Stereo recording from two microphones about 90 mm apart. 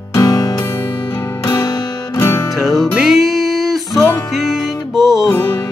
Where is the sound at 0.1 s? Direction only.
40° left (ahead or behind).